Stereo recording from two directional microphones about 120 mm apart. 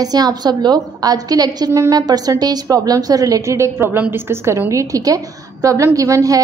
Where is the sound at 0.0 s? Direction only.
35° right (ahead or behind).